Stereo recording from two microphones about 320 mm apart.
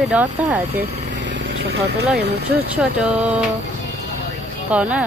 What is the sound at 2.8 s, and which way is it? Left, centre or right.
Speech, centre.